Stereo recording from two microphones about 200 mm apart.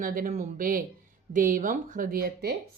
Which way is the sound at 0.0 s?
45° right (ahead or behind).